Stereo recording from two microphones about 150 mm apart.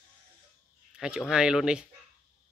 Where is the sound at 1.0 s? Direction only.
5° right (ahead or behind).